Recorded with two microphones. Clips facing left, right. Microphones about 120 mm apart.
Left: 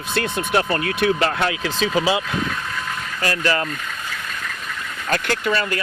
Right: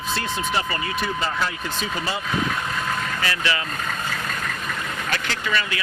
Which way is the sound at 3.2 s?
45° left (ahead or behind).